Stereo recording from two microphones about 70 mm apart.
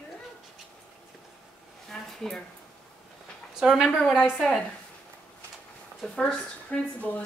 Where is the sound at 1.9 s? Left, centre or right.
Centre.